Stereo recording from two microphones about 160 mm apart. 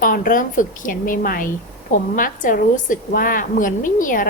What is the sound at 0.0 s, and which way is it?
A woman's voice, 60° left (ahead or behind).